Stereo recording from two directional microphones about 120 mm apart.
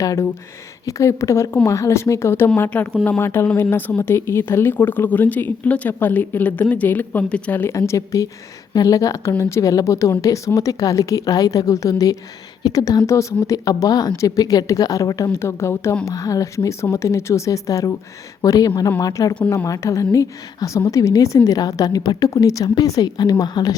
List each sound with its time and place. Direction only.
0.0 s speech: 30° left (ahead or behind)
2.6 s a woman's voice: 10° left (ahead or behind); by 23.7 s 35° left (ahead or behind)